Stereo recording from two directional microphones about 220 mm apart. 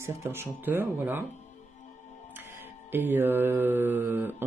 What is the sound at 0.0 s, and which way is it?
Speech, 10° right (ahead or behind).